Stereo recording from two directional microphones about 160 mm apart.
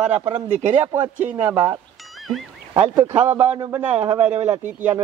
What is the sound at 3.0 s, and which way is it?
Speech, 10° right (ahead or behind).